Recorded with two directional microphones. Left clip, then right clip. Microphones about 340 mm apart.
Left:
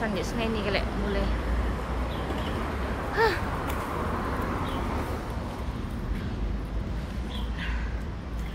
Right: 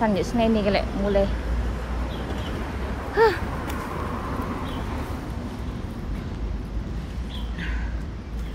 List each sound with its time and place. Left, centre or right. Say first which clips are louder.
0.1 s a woman's voice: right 7 dB; centre
3.2 s a sound: right 6 dB; centre
3.7 s vehicle: even; left